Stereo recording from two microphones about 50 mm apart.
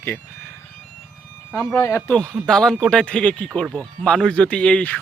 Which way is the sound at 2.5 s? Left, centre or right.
Centre.